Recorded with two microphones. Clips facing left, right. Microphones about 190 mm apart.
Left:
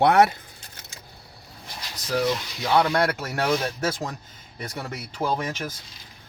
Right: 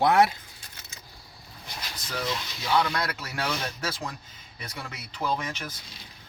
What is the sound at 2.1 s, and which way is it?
Speech, 55° left (ahead or behind).